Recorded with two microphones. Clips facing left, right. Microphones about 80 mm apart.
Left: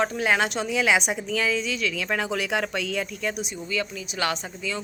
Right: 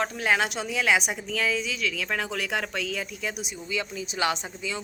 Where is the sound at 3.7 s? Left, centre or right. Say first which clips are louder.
Even; right.